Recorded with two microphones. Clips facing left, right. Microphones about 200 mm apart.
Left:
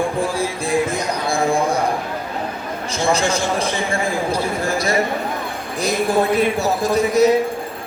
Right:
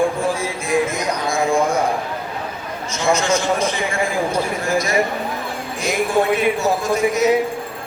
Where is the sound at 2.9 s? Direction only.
35° left (ahead or behind).